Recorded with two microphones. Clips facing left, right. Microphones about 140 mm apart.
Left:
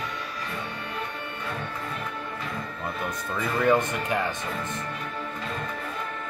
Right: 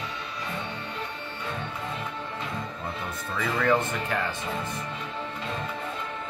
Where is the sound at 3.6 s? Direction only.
15° left (ahead or behind).